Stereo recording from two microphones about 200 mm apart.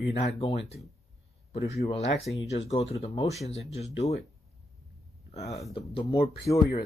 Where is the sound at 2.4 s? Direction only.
30° left (ahead or behind).